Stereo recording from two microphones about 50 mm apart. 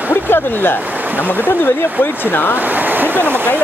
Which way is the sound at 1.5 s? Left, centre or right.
Left.